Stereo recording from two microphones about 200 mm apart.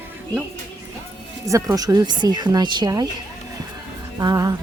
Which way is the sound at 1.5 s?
15° right (ahead or behind).